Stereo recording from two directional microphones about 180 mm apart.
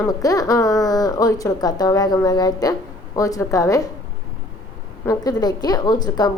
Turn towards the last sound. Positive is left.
turn(degrees=20)  # may be behind; listen again after turning